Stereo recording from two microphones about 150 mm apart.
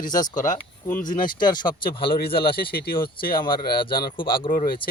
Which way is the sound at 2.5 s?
90° left.